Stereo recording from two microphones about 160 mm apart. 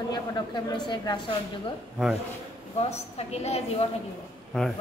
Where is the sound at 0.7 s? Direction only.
25° left (ahead or behind).